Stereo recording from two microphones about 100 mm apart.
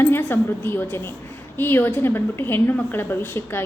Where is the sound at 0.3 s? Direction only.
20° left (ahead or behind).